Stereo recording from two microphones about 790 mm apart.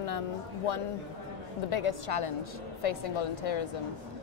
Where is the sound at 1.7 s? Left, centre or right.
Left.